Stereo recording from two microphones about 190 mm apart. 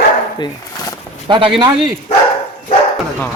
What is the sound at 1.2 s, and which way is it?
Speech, 25° right (ahead or behind).